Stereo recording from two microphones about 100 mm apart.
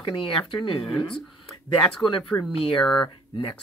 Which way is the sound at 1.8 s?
5° left (ahead or behind).